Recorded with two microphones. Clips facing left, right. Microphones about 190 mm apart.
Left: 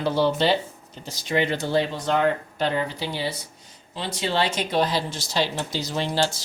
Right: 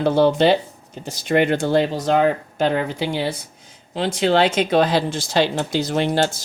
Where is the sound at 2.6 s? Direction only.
50° right (ahead or behind).